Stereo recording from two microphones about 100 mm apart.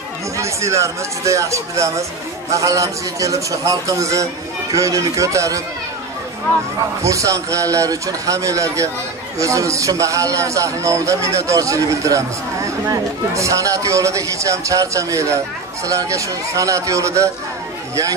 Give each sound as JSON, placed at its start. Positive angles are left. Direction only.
{"t": 0.4, "sound": "a man's voice", "side_deg": -30}
{"t": 7.0, "sound": "a man's voice", "side_deg": -30}